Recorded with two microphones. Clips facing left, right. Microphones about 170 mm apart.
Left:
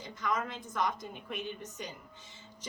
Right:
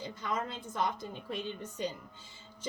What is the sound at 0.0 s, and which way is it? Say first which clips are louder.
A woman's voice: left 1 dB; 30° right (ahead or behind).